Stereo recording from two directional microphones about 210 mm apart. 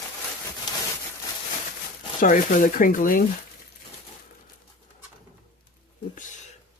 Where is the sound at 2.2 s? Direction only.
40° left (ahead or behind).